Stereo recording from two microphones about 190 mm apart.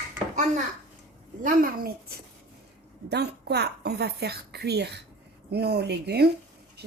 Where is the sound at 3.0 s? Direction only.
60° right (ahead or behind).